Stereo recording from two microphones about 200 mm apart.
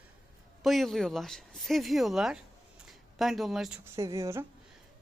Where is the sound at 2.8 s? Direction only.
Centre (ahead or behind).